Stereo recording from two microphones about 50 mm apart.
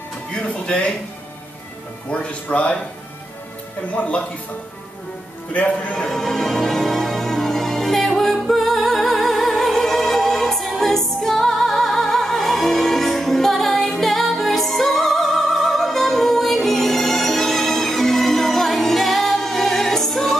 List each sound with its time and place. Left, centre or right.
0.3 s speech: left
2.0 s speech: left
3.9 s speech: left
5.5 s speech: left
6.0 s music: centre